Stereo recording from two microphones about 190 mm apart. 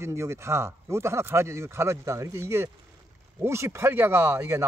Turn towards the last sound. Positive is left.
turn(degrees=-15)  # may be behind; listen again after turning